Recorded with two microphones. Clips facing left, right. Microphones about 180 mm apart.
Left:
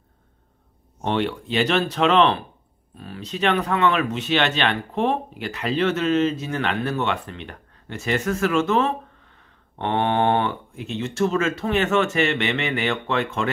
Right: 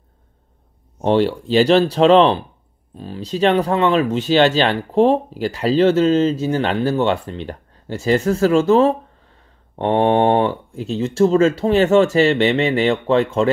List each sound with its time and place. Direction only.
1.0 s speech: 35° right (ahead or behind)